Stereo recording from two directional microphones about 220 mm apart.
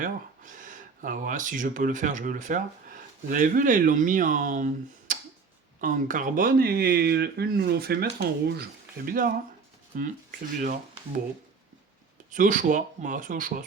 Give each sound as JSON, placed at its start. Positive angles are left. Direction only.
{"t": 0.0, "sound": "speech", "side_deg": -35}
{"t": 12.3, "sound": "speech", "side_deg": -35}